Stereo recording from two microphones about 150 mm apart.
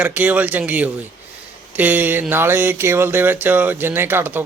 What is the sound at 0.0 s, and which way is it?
Speech, 10° right (ahead or behind).